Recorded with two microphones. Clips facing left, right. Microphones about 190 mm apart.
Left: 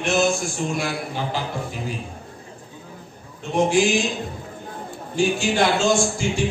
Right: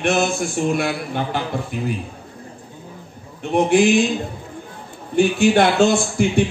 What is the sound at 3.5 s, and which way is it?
Speech, 60° right (ahead or behind).